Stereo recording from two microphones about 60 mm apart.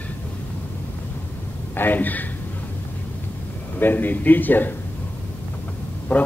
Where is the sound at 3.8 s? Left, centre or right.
Left.